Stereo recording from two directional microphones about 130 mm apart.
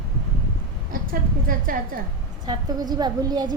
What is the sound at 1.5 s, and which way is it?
Speech, 90° right.